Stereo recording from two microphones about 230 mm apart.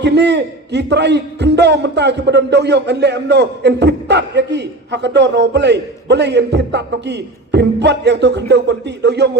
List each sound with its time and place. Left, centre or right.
0.0 s a man's voice: right